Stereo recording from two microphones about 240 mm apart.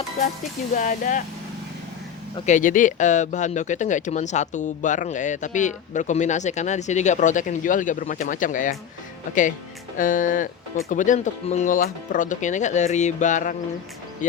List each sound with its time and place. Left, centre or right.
0.7 s speech: left
2.5 s speech: left
10.0 s speech: left